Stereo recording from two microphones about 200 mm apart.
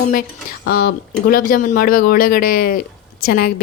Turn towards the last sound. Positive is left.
turn(degrees=45)  # may be behind; listen again after turning